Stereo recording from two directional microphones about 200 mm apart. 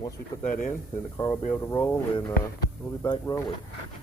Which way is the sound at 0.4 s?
40° left (ahead or behind).